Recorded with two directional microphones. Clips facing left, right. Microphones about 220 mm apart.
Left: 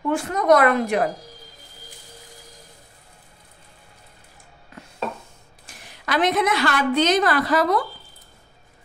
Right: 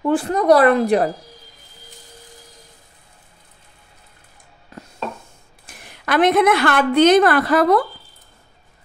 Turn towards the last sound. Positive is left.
turn(degrees=-55)  # may be behind; listen again after turning